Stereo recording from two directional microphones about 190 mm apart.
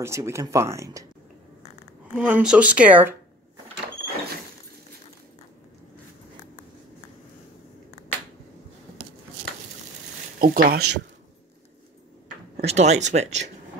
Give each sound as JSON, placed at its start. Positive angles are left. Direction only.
{"t": 0.0, "sound": "speech", "side_deg": -15}
{"t": 2.1, "sound": "speech", "side_deg": -5}
{"t": 10.4, "sound": "speech", "side_deg": -50}
{"t": 12.5, "sound": "speech", "side_deg": -35}